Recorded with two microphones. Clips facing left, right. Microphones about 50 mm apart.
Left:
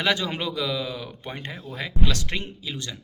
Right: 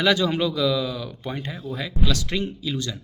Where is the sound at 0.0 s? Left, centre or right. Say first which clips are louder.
Right 4 dB; left.